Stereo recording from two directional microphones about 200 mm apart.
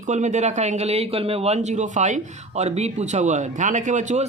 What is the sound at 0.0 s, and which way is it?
Speech, 35° right (ahead or behind).